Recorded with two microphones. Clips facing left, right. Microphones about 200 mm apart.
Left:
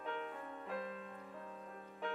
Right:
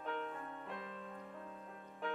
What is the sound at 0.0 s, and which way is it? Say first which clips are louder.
Music: right 1 dB; 5° left (ahead or behind).